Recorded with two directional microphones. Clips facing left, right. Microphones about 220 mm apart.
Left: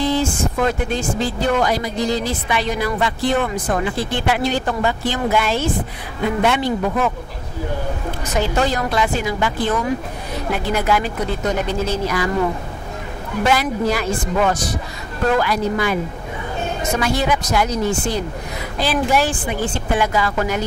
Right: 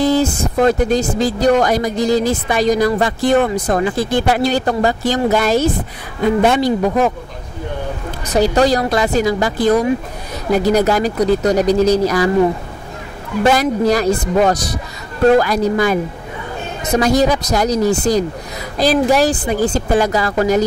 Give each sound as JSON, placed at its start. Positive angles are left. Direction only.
{"t": 0.0, "sound": "speech", "side_deg": -40}
{"t": 8.3, "sound": "speech", "side_deg": -35}
{"t": 13.5, "sound": "speech", "side_deg": -40}